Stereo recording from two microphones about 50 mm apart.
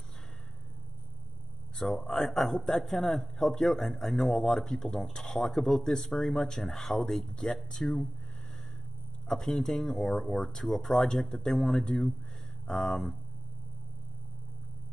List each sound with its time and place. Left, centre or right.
1.8 s speech: centre
9.3 s speech: centre